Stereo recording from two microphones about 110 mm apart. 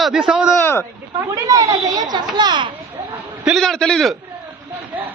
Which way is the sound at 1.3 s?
30° right (ahead or behind).